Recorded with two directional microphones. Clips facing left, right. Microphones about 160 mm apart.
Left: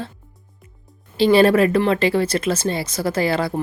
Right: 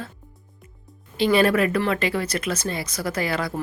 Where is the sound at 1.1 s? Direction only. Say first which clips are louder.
Left 5 dB; 30° left (ahead or behind).